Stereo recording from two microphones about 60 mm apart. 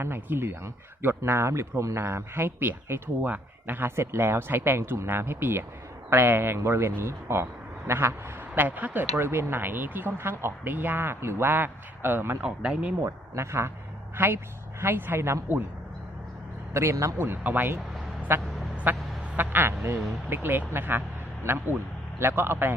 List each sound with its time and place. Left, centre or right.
0.0 s a man's voice: right
8.5 s a man's voice: right
9.1 s a man's voice: right
12.4 s speech: centre
13.1 s speech: right
14.2 s a man's voice: right
16.7 s speech: right
17.2 s a man's voice: right
18.3 s a man's voice: right